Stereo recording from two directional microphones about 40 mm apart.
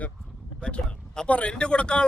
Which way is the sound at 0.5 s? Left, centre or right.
Left.